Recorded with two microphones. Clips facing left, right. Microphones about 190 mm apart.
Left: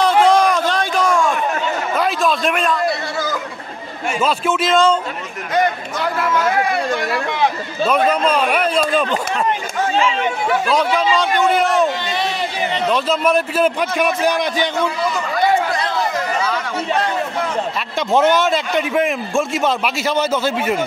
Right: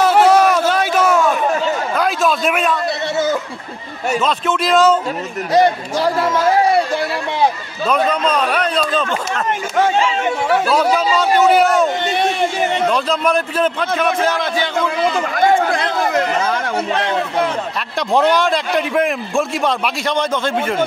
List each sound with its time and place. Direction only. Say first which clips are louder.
0.0 s a sound: right 2 dB; 5° right (ahead or behind)
4.2 s a man's voice: left 3 dB; 10° left (ahead or behind)
5.5 s a man's voice: right 4 dB; 35° right (ahead or behind)
7.9 s a man's voice: even; 5° left (ahead or behind)
11.4 s a man's voice: right 3 dB; 5° right (ahead or behind)
12.0 s speech: right 4 dB; 55° right (ahead or behind)
12.9 s a man's voice: left 1 dB; 5° left (ahead or behind)
15.3 s a sound: right 1 dB; 50° right (ahead or behind)
17.0 s speech: right 3 dB; 75° right (ahead or behind)
17.9 s a man's voice: even; centre (ahead or behind)